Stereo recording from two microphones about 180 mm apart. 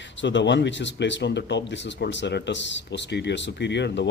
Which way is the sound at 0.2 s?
80° left.